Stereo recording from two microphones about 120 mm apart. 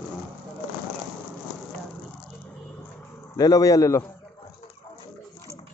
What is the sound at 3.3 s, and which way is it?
Speech, 30° left (ahead or behind).